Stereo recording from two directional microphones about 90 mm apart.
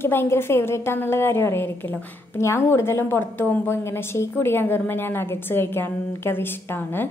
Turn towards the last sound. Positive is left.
turn(degrees=25)  # may be behind; listen again after turning